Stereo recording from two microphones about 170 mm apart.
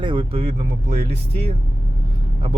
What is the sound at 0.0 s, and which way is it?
Speech, 30° right (ahead or behind).